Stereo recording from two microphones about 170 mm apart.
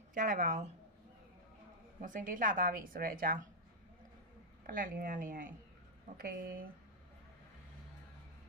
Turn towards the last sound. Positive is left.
turn(degrees=-55)  # may be behind; listen again after turning